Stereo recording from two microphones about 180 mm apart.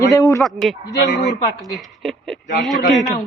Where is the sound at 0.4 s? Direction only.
Centre (ahead or behind).